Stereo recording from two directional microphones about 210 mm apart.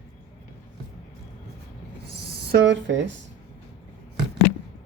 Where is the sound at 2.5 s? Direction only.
55° right (ahead or behind).